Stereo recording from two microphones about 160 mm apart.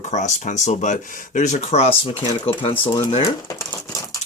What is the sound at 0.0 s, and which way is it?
Speech, 45° left (ahead or behind).